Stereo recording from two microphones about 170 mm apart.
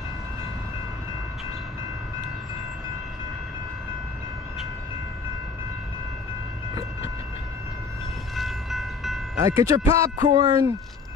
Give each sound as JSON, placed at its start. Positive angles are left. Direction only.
{"t": 8.4, "sound": "train", "side_deg": 0}
{"t": 9.6, "sound": "speech", "side_deg": -20}